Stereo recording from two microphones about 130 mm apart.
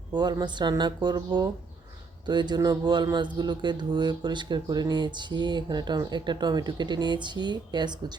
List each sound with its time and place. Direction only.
0.1 s speech: 30° right (ahead or behind)